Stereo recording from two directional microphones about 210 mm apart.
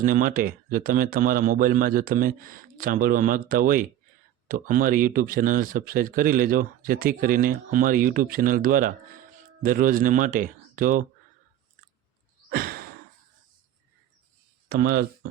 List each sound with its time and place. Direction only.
0.0 s speech: 40° right (ahead or behind)
12.5 s sigh: 45° right (ahead or behind)
14.7 s speech: 45° right (ahead or behind)